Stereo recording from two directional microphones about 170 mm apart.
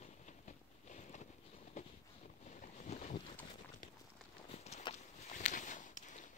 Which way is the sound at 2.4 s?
45° left (ahead or behind).